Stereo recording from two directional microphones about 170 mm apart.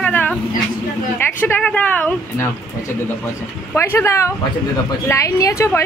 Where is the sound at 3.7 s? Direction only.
15° left (ahead or behind).